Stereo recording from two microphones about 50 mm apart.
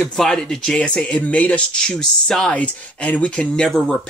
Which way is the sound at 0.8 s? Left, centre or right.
Centre.